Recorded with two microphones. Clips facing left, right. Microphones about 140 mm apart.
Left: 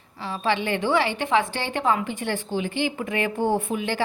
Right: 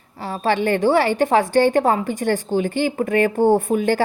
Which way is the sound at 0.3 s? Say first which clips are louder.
Right 5 dB; 45° right (ahead or behind).